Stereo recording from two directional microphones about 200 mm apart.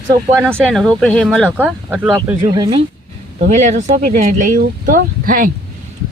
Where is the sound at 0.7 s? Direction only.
Centre (ahead or behind).